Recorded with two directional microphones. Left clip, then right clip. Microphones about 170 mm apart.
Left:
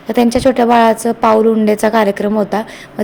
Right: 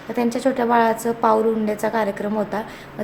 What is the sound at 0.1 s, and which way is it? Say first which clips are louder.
A woman's voice: left 9 dB; 45° left (ahead or behind).